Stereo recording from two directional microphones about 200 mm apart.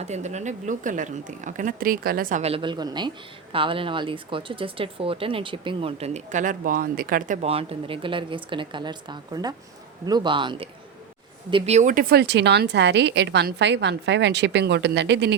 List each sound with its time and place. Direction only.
0.0 s a woman's voice: 35° right (ahead or behind)
7.4 s speech: 30° right (ahead or behind); by 15.4 s 60° right (ahead or behind)